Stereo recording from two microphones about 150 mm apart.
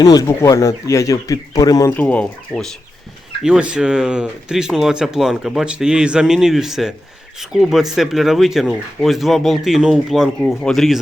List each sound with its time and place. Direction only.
0.0 s speech: 25° left (ahead or behind)
1.9 s speech: 10° left (ahead or behind)
3.4 s speech: 5° right (ahead or behind)